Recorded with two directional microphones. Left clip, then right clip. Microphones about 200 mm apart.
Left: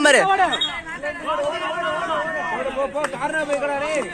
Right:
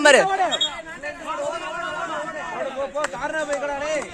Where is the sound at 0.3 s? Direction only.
60° right (ahead or behind).